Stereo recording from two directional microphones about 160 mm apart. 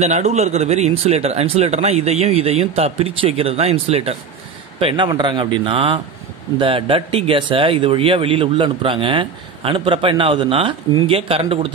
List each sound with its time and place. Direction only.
0.0 s speech: 45° right (ahead or behind)